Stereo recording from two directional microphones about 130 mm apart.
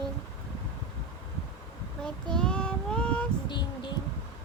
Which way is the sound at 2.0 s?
5° left (ahead or behind).